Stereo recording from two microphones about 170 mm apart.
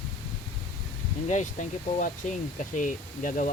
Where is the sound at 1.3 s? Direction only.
45° left (ahead or behind).